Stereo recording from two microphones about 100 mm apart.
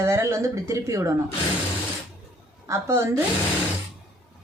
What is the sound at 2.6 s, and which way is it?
Speech, 30° right (ahead or behind).